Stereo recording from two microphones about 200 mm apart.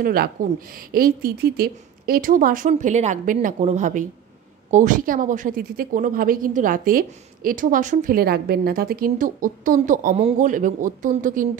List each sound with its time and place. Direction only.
0.0 s a woman's voice: 50° right (ahead or behind)